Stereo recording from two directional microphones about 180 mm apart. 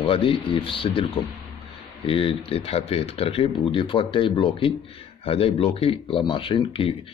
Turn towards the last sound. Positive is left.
turn(degrees=30)  # may be behind; listen again after turning